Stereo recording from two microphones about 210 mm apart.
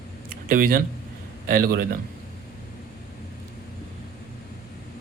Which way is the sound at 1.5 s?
45° right (ahead or behind).